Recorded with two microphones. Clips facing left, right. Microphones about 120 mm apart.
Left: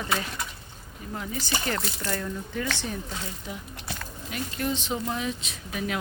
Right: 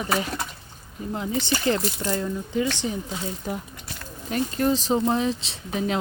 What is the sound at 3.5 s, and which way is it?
Speech, 45° right (ahead or behind).